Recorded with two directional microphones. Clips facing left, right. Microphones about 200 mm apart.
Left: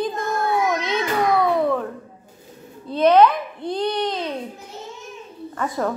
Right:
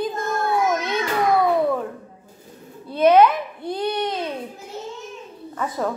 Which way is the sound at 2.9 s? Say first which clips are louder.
Even; 10° right (ahead or behind).